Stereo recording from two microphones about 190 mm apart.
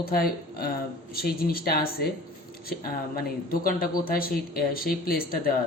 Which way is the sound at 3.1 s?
50° left (ahead or behind).